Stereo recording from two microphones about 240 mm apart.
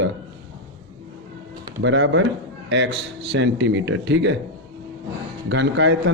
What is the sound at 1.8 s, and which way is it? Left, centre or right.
A man's voice, right.